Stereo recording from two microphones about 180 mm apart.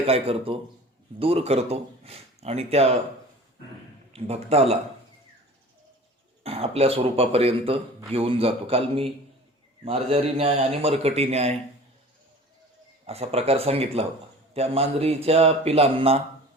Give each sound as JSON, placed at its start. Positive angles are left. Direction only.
{"t": 0.0, "sound": "a man's voice", "side_deg": -30}
{"t": 4.1, "sound": "a man's voice", "side_deg": -35}
{"t": 6.4, "sound": "a man's voice", "side_deg": -35}
{"t": 13.1, "sound": "a man's voice", "side_deg": -35}